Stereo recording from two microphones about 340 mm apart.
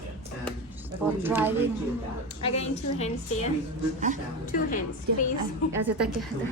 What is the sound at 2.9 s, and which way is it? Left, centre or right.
Speech, centre.